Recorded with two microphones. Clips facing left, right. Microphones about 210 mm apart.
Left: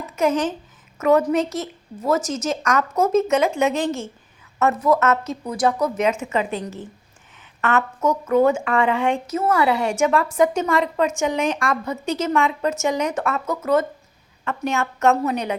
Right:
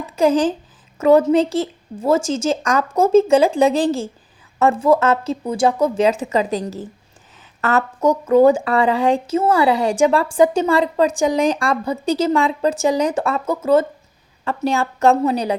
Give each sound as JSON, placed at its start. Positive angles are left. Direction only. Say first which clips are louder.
{"t": 0.2, "sound": "a woman's voice", "louder": "right 5 dB", "side_deg": -30}